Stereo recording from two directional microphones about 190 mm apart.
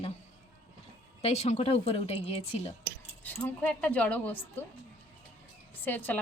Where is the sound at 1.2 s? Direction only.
35° left (ahead or behind).